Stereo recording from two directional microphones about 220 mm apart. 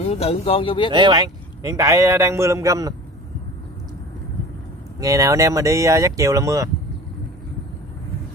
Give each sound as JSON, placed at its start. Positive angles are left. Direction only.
{"t": 0.0, "sound": "speech", "side_deg": 30}
{"t": 0.9, "sound": "a man's voice", "side_deg": -20}
{"t": 5.0, "sound": "a man's voice", "side_deg": -15}